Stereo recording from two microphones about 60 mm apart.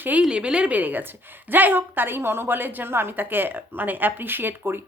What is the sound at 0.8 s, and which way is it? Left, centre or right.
A woman's voice, right.